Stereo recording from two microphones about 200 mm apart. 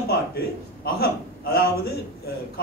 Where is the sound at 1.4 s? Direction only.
50° left (ahead or behind).